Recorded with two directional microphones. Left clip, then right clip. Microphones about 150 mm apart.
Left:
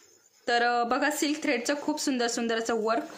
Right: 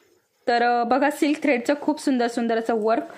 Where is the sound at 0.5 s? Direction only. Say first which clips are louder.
Right 5 dB; 35° right (ahead or behind).